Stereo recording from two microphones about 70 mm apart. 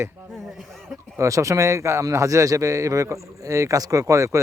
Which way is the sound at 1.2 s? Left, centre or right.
Right.